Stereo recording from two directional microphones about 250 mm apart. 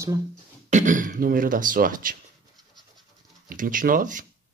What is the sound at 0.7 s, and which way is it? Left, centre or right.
Speech, right.